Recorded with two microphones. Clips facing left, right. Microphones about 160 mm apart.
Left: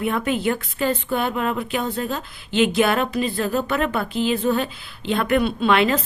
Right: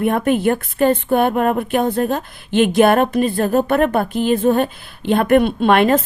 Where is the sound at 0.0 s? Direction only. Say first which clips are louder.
Right 6 dB; 50° right (ahead or behind).